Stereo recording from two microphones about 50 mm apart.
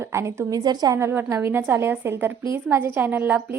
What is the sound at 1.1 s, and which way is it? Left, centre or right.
A woman's voice, right.